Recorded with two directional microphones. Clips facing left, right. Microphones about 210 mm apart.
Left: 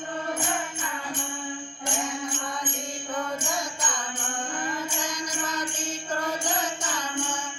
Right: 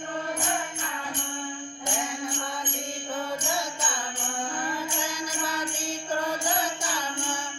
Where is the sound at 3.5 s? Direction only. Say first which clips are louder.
Right 1 dB; 10° right (ahead or behind).